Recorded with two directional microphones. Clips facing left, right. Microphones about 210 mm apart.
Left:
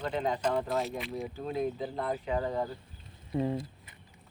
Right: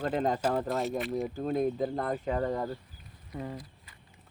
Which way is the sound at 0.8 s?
Centre (ahead or behind).